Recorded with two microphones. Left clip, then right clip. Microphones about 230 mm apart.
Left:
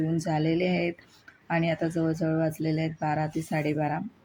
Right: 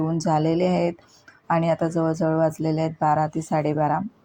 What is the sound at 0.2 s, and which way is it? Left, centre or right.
Speech, centre.